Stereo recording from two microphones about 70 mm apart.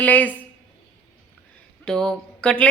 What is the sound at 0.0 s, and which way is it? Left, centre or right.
Speech, left.